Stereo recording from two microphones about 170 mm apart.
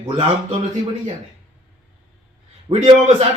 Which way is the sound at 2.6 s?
25° right (ahead or behind).